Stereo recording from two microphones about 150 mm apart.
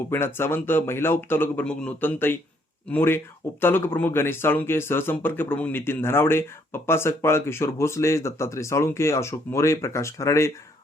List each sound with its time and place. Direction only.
0.1 s speech: 15° left (ahead or behind)